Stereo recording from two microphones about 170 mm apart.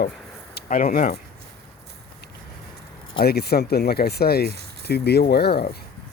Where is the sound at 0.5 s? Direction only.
55° left (ahead or behind).